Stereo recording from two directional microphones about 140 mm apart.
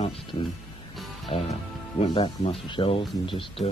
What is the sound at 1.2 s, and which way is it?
Music, 45° left (ahead or behind).